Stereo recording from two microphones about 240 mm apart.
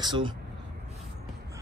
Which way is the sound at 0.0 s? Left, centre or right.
Centre.